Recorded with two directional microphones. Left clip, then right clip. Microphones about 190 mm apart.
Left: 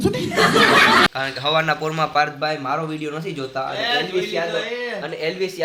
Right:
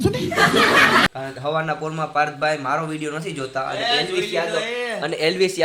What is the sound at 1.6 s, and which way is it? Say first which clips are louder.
A man's voice: left 4 dB; centre (ahead or behind).